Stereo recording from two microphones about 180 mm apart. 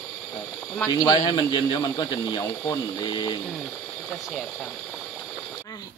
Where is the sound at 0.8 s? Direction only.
20° left (ahead or behind).